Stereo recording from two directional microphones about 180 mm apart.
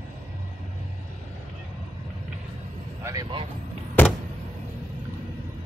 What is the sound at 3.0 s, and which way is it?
Speech, 20° right (ahead or behind).